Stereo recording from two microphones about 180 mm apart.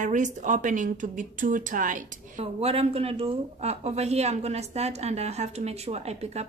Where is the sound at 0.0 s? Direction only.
45° right (ahead or behind).